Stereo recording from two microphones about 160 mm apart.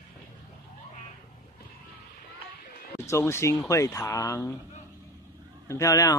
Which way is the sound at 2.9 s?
20° left (ahead or behind).